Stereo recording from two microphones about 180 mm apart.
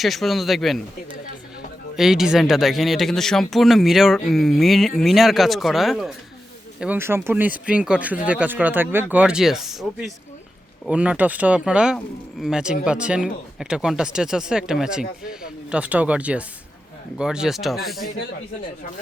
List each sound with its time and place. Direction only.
0.0 s speech: centre (ahead or behind)
2.0 s speech: centre (ahead or behind)